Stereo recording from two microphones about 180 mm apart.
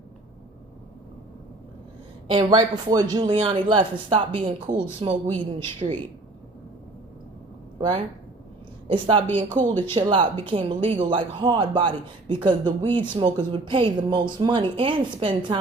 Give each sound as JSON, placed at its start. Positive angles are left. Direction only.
{"t": 2.3, "sound": "speech", "side_deg": -25}
{"t": 5.5, "sound": "speech", "side_deg": 15}
{"t": 7.8, "sound": "speech", "side_deg": -25}